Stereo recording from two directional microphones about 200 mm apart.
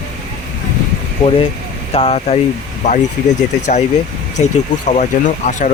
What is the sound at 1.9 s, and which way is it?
Speech, 30° left (ahead or behind).